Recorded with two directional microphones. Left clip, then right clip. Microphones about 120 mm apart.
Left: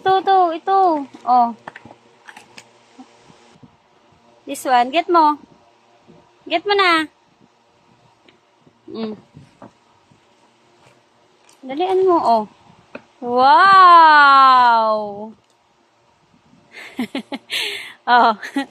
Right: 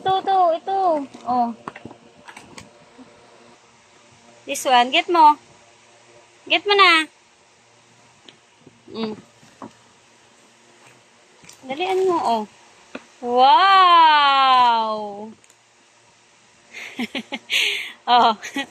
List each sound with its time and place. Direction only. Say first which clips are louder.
0.0 s a sound: left 3 dB; 90° left
4.6 s a woman's voice: left 1 dB; 40° left (ahead or behind)
6.4 s a woman's voice: right 1 dB; 45° left (ahead or behind)
11.6 s speech: left 4 dB; 90° left
16.7 s speech: left 1 dB; 75° left (ahead or behind)